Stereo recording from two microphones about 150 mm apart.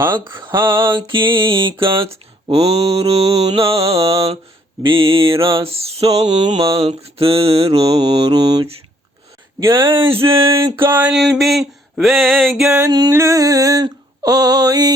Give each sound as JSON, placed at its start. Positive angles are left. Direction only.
{"t": 0.3, "sound": "mantra", "side_deg": -30}
{"t": 0.5, "sound": "a sound", "side_deg": -15}
{"t": 0.9, "sound": "mantra", "side_deg": -35}
{"t": 3.9, "sound": "mantra", "side_deg": -20}
{"t": 4.8, "sound": "mantra", "side_deg": -35}
{"t": 8.3, "sound": "mantra", "side_deg": -25}
{"t": 9.6, "sound": "speech", "side_deg": -20}
{"t": 9.8, "sound": "mantra", "side_deg": -35}
{"t": 10.8, "sound": "a sound", "side_deg": -15}
{"t": 12.6, "sound": "mantra", "side_deg": -20}